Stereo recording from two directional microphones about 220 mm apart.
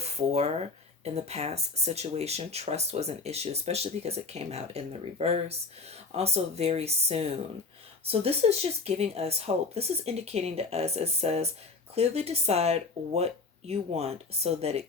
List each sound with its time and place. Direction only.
0.0 s speech: 30° right (ahead or behind)